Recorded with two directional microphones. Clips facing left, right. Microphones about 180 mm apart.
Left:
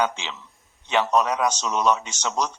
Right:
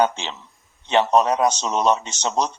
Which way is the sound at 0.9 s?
25° right (ahead or behind).